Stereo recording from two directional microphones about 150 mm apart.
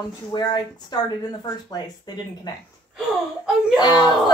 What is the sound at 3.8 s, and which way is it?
Speech, 30° left (ahead or behind).